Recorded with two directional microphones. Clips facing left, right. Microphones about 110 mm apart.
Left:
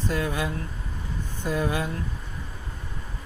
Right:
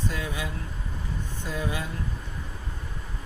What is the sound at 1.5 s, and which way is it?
Speech, 55° left (ahead or behind).